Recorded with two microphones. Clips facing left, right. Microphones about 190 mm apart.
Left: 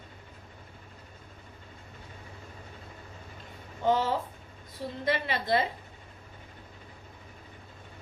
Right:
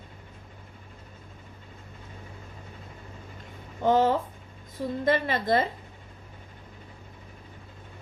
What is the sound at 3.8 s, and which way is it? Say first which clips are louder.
Speech: right 4 dB; 50° right (ahead or behind).